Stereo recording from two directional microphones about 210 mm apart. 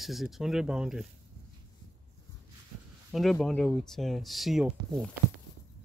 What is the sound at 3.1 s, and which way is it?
Speech, centre (ahead or behind).